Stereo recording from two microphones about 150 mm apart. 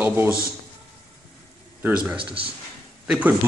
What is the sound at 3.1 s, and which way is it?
Speech, 10° right (ahead or behind).